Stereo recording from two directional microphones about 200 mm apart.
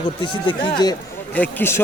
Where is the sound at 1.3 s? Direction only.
10° left (ahead or behind).